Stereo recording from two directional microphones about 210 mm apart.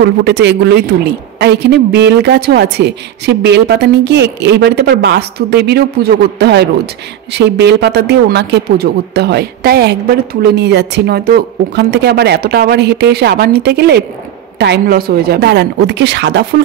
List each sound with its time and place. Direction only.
0.0 s a woman's voice: 55° right (ahead or behind)